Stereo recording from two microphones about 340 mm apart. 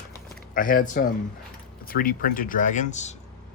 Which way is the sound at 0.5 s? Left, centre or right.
Left.